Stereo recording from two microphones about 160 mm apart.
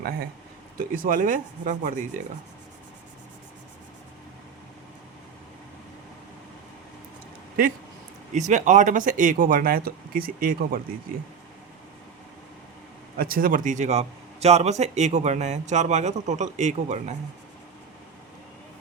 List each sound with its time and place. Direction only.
0.8 s speech: 60° right (ahead or behind)
8.3 s speech: 50° right (ahead or behind)
13.1 s a man's voice: 65° right (ahead or behind); by 17.2 s 45° right (ahead or behind)